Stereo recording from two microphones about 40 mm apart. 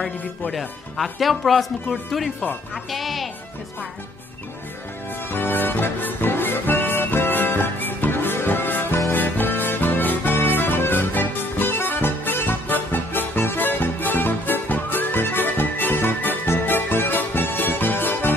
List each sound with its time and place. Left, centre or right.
0.5 s speech: centre
5.3 s music: left